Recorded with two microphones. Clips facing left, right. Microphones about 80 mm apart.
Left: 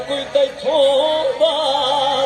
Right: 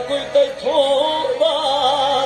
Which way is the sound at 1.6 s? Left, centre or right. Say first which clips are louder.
Left 1 dB; left.